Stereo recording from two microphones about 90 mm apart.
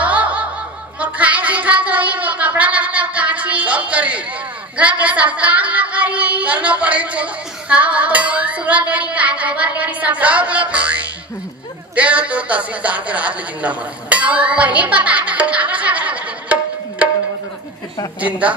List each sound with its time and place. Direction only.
0.0 s snicker: 15° right (ahead or behind)
0.9 s music: 15° right (ahead or behind)
4.7 s child singing: 15° right (ahead or behind)
11.9 s a man's voice: 15° right (ahead or behind)